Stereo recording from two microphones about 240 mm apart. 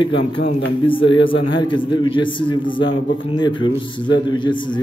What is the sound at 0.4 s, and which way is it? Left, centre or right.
Speech, left.